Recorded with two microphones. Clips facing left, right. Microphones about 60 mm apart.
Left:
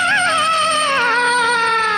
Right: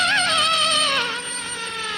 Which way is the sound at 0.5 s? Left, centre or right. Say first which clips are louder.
Left 6 dB; left.